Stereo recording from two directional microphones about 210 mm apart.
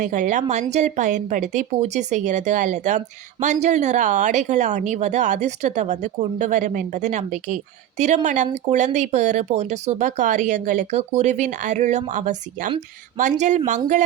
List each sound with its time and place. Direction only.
0.0 s speech: 35° right (ahead or behind)